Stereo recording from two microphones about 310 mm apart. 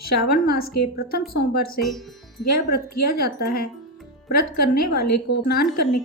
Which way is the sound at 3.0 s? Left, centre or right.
Left.